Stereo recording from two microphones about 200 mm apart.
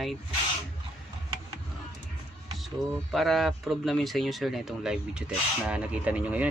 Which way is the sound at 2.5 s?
Centre (ahead or behind).